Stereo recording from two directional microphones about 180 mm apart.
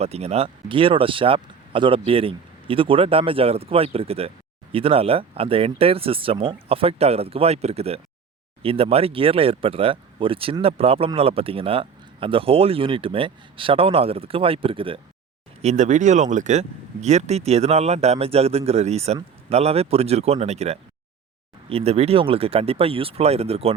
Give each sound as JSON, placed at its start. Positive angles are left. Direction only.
{"t": 0.0, "sound": "speech", "side_deg": -35}
{"t": 15.6, "sound": "speech", "side_deg": -40}